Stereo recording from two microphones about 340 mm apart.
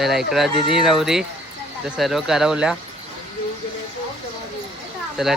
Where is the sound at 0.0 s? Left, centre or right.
Centre.